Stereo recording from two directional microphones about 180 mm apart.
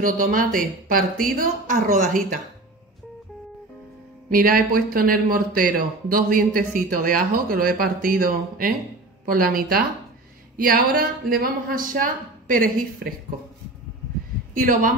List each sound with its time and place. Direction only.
0.0 s speech: 45° right (ahead or behind)
4.3 s speech: 55° right (ahead or behind)
14.6 s speech: 45° right (ahead or behind)